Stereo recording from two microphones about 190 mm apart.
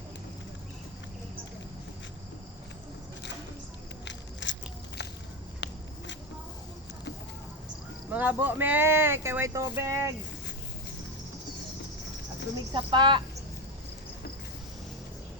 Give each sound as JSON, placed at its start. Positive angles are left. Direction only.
{"t": 4.0, "sound": "biting", "side_deg": 75}
{"t": 5.6, "sound": "walk", "side_deg": 70}
{"t": 8.1, "sound": "speech", "side_deg": -10}
{"t": 12.7, "sound": "speech", "side_deg": -25}